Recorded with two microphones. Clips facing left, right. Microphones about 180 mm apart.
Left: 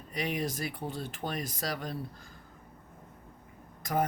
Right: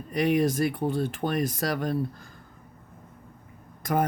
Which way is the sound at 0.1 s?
55° right (ahead or behind).